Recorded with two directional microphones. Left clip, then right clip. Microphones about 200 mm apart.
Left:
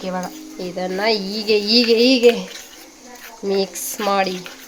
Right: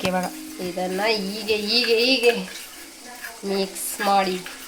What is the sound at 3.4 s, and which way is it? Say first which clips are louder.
Speech: left 5 dB; 40° left (ahead or behind).